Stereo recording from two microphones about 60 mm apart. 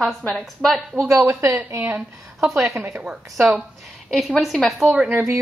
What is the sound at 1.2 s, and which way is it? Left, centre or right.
Speech, right.